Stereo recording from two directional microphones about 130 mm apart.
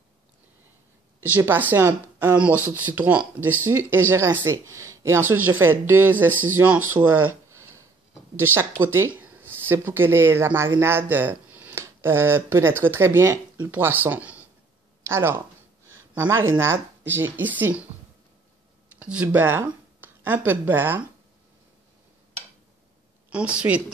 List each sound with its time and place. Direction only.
1.2 s speech: 15° right (ahead or behind)
8.4 s speech: 15° right (ahead or behind)
18.9 s a sound: 10° right (ahead or behind)
19.2 s speech: 20° right (ahead or behind)
23.3 s speech: 10° right (ahead or behind)